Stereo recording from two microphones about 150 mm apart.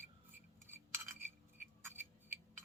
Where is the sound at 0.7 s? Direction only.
15° right (ahead or behind).